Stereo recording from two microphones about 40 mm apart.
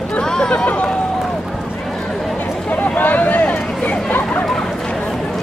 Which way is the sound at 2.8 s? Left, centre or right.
Left.